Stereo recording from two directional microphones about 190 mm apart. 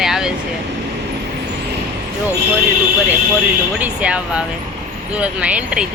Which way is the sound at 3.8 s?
5° right (ahead or behind).